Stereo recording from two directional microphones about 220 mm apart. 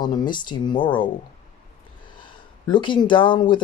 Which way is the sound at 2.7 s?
20° left (ahead or behind).